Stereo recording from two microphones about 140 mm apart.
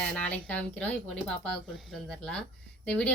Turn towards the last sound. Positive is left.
turn(degrees=10)  # may be behind; listen again after turning